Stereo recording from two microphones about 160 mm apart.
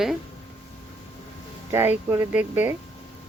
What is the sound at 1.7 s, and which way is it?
Speech, 15° right (ahead or behind).